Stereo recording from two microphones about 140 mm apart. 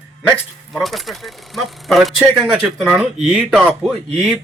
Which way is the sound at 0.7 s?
Centre (ahead or behind).